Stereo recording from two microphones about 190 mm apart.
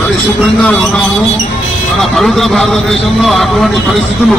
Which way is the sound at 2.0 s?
Centre (ahead or behind).